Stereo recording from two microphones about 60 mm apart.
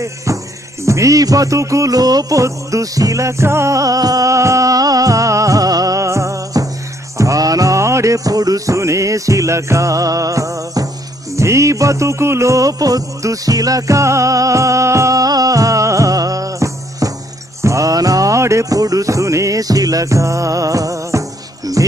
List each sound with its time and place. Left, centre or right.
0.8 s music: right
3.7 s music: right
11.3 s music: right